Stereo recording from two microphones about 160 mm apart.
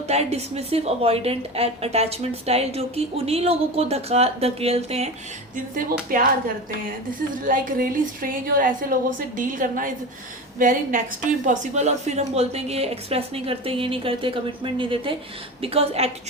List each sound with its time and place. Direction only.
0.1 s a woman's voice: 40° right (ahead or behind)
5.7 s a woman's voice: 60° right (ahead or behind)
7.4 s a woman's voice: 60° right (ahead or behind); by 16.0 s 40° right (ahead or behind)